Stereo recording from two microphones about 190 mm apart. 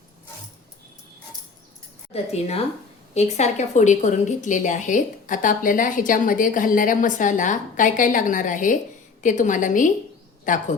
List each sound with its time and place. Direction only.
2.1 s a woman's voice: 35° left (ahead or behind)